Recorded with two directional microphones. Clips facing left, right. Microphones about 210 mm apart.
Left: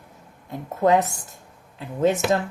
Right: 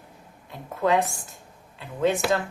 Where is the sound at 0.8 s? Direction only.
45° left (ahead or behind).